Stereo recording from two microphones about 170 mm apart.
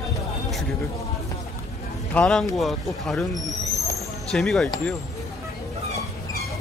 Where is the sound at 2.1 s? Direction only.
5° left (ahead or behind).